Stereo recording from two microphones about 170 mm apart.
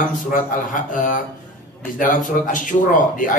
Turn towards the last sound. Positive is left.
turn(degrees=50)  # may be behind; listen again after turning